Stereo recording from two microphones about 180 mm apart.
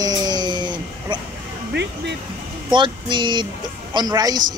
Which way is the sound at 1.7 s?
70° right (ahead or behind).